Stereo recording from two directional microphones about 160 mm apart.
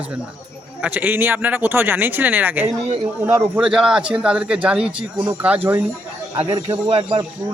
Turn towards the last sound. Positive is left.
turn(degrees=-30)  # may be behind; listen again after turning